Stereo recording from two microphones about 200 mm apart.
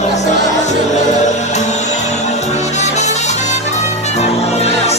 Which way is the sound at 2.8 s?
35° left (ahead or behind).